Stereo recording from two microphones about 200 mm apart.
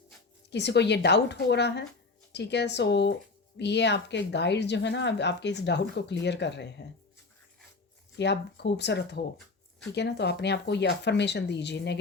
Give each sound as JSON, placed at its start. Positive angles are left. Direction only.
{"t": 0.5, "sound": "speech", "side_deg": 60}
{"t": 8.1, "sound": "speech", "side_deg": 60}